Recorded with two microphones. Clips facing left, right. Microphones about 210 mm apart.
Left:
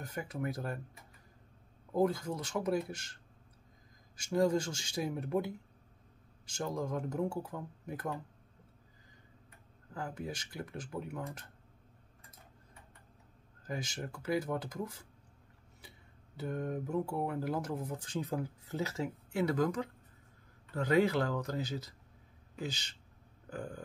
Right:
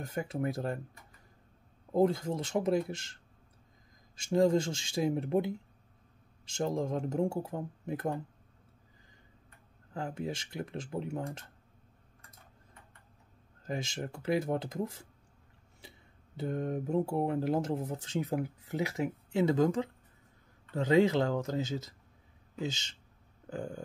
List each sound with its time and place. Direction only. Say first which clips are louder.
0.0 s speech: right 4 dB; 25° right (ahead or behind)
1.9 s speech: right 3 dB; 25° right (ahead or behind)
4.2 s speech: right 4 dB; 25° right (ahead or behind)
9.9 s speech: right 4 dB; 25° right (ahead or behind)
13.7 s speech: right 3 dB; 25° right (ahead or behind)
16.3 s speech: right 3 dB; 25° right (ahead or behind)